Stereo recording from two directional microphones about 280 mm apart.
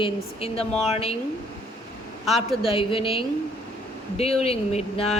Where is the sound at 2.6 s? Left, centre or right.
Centre.